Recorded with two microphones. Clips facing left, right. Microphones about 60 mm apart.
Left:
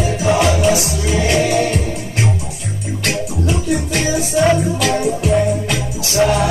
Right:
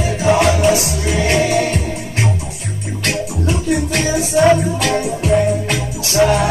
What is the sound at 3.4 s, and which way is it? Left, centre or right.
Music, right.